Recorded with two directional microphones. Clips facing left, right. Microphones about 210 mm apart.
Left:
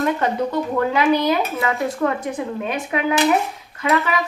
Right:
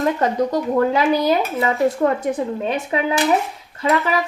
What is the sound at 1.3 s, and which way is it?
Speech, 25° right (ahead or behind).